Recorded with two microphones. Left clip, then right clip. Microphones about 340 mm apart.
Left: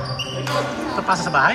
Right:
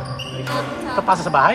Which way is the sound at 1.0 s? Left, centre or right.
Centre.